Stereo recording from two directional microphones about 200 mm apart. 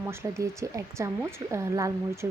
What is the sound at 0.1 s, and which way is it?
Speech, 15° right (ahead or behind).